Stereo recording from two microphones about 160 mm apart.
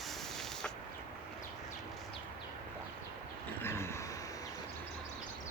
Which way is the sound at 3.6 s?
15° left (ahead or behind).